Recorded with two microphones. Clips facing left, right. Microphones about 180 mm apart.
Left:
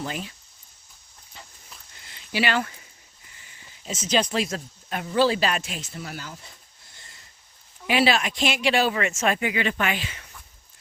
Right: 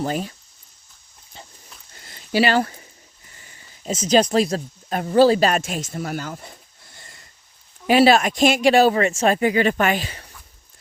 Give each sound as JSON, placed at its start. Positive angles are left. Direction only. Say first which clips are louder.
{"t": 0.0, "sound": "speech", "louder": "right 8 dB", "side_deg": -40}
{"t": 2.0, "sound": "a sound", "louder": "right 7 dB", "side_deg": -45}
{"t": 3.3, "sound": "speech", "louder": "right 2 dB", "side_deg": -40}
{"t": 7.9, "sound": "speech", "louder": "right 7 dB", "side_deg": -40}